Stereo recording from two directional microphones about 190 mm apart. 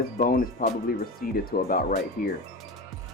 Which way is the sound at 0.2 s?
50° left (ahead or behind).